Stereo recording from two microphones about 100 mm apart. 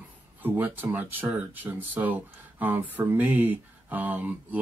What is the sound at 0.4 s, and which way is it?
Speech, 20° right (ahead or behind).